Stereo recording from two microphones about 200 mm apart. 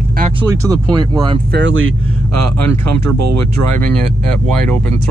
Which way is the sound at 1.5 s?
75° right (ahead or behind).